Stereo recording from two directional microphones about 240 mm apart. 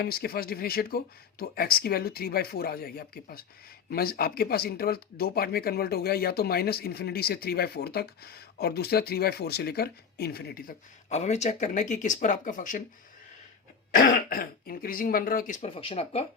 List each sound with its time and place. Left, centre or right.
0.0 s speech: left
13.9 s speech: left